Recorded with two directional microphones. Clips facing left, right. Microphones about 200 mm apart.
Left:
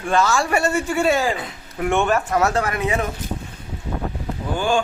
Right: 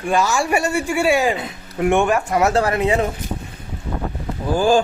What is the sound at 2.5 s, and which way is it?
Speech, 30° right (ahead or behind).